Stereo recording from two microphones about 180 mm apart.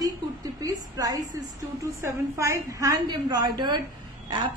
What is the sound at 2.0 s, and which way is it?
A woman's voice, 15° right (ahead or behind).